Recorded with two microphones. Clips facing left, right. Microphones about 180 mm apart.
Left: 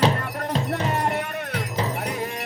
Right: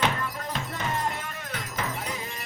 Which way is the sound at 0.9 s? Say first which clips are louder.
Left 4 dB; 65° left (ahead or behind).